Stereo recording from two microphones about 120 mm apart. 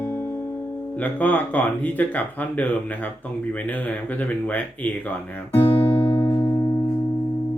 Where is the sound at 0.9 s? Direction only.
15° left (ahead or behind).